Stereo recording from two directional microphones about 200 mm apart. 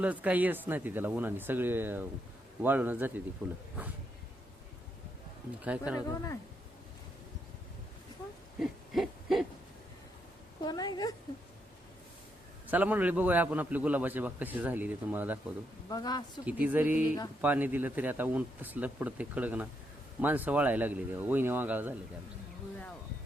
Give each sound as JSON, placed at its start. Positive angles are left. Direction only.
{"t": 0.0, "sound": "a man's voice", "side_deg": -5}
{"t": 5.6, "sound": "a man's voice", "side_deg": -5}
{"t": 8.5, "sound": "hoot", "side_deg": 0}
{"t": 10.6, "sound": "a woman's voice", "side_deg": 20}
{"t": 12.7, "sound": "a man's voice", "side_deg": -10}
{"t": 15.9, "sound": "a woman's voice", "side_deg": 20}
{"t": 16.5, "sound": "a man's voice", "side_deg": -10}